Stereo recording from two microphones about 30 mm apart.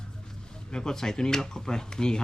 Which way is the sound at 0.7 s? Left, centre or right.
Left.